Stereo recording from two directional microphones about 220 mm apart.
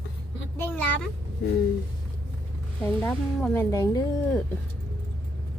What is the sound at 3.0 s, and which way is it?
Speech, 10° left (ahead or behind).